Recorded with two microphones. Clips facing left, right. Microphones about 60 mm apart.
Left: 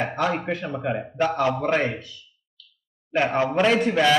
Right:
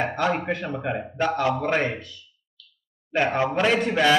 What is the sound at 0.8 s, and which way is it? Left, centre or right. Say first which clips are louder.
A man's voice: left 2 dB; centre.